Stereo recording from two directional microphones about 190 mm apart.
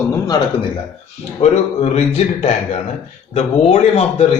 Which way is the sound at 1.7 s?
35° left (ahead or behind).